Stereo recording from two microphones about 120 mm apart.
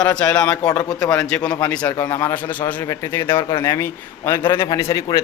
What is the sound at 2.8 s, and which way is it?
A man's voice, 25° left (ahead or behind).